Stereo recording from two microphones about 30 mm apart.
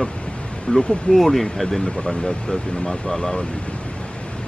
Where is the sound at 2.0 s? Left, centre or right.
Left.